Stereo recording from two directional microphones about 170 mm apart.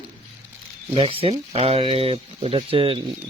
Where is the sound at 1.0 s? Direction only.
35° right (ahead or behind).